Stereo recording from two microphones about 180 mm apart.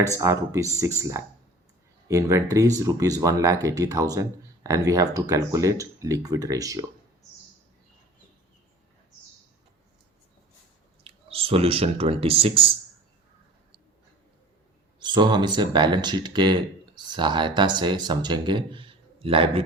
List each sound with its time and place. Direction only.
0.2 s speech: 15° right (ahead or behind)
11.0 s speech: 30° right (ahead or behind)
14.9 s speech: 25° right (ahead or behind)